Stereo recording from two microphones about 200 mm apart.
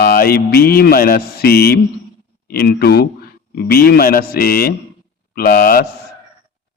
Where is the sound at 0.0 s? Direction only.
50° left (ahead or behind).